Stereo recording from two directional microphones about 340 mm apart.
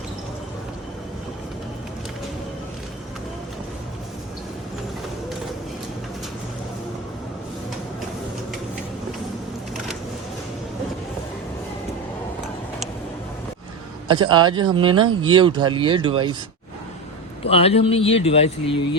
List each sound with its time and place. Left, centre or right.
14.1 s speech: centre
17.4 s a man's voice: centre